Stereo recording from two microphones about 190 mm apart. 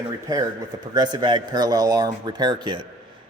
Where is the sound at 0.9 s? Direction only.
20° right (ahead or behind).